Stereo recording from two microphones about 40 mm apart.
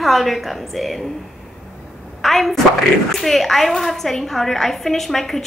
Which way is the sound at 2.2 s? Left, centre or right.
Centre.